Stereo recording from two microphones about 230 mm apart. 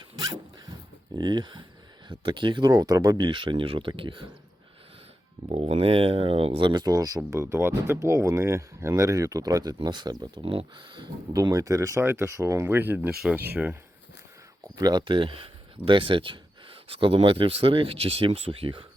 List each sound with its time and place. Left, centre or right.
0.2 s zipper: centre
2.0 s speech: right
5.5 s speech: right; by 13.7 s centre
14.8 s speech: centre